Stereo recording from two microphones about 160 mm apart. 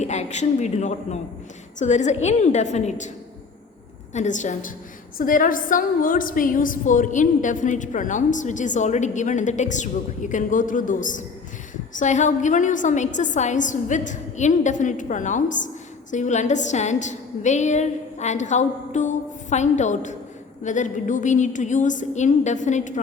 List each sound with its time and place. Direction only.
0.0 s a woman's voice: 45° left (ahead or behind)
4.1 s a woman's voice: 50° left (ahead or behind)